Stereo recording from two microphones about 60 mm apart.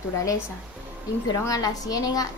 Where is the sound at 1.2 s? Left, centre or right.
Left.